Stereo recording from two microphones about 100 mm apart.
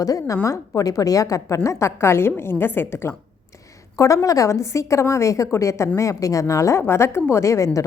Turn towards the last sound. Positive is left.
turn(degrees=30)  # may be behind; listen again after turning